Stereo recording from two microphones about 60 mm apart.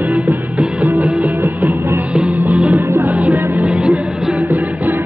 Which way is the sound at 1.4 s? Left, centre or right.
Right.